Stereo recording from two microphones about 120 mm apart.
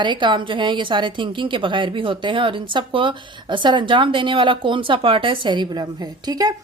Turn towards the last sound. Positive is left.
turn(degrees=-30)  # may be behind; listen again after turning